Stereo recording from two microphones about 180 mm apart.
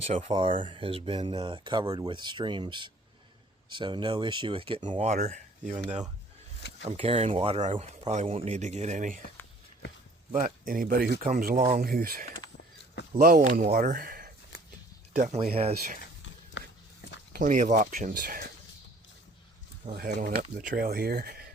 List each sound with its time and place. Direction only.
0.1 s speech: 40° right (ahead or behind)
6.6 s a sound: 70° left (ahead or behind)
6.8 s speech: 35° right (ahead or behind)
10.3 s speech: 50° right (ahead or behind)
16.2 s a sound: 80° left
17.3 s speech: 45° right (ahead or behind)
20.0 s speech: 60° right (ahead or behind)